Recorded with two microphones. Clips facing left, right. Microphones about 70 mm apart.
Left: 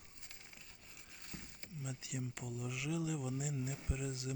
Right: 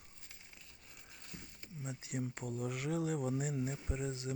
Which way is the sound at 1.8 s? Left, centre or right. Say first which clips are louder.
Right 3 dB; right.